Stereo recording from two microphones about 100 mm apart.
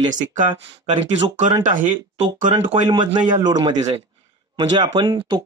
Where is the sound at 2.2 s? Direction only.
50° right (ahead or behind).